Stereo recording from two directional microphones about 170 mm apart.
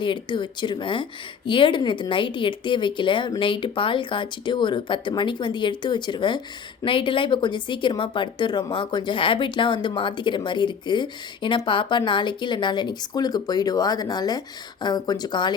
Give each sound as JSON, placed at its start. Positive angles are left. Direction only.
{"t": 0.0, "sound": "a woman's voice", "side_deg": 25}